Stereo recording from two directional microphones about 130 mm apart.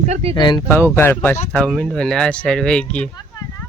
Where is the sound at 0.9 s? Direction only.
15° left (ahead or behind).